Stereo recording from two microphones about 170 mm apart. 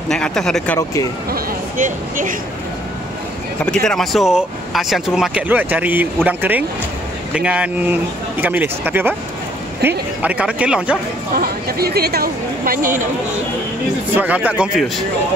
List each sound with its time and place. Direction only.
0.1 s speech: 5° left (ahead or behind)
0.7 s speech: 20° left (ahead or behind)
1.3 s speech: 50° right (ahead or behind)
3.6 s speech: 5° left (ahead or behind)
11.3 s speech: 65° right (ahead or behind)
14.1 s speech: 10° right (ahead or behind)